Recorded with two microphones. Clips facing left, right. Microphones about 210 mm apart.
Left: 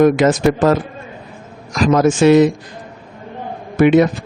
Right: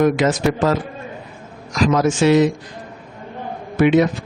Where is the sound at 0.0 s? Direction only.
50° left (ahead or behind).